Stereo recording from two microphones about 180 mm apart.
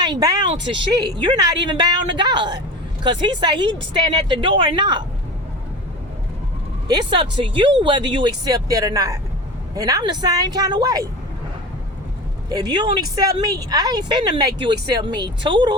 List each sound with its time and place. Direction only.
0.0 s speech: 20° right (ahead or behind)
6.8 s speech: 25° right (ahead or behind)
12.5 s speech: 25° right (ahead or behind)